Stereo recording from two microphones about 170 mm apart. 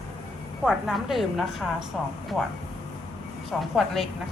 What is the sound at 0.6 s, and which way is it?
A woman's voice, centre (ahead or behind).